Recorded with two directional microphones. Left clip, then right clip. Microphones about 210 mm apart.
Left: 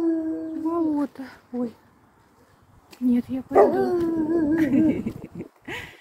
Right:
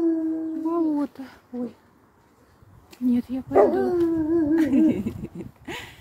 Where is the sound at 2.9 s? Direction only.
5° right (ahead or behind).